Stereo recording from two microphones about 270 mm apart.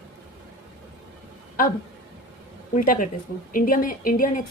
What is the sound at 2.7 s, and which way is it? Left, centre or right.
Speech, left.